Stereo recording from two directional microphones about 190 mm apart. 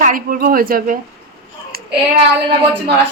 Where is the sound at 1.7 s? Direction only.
50° right (ahead or behind).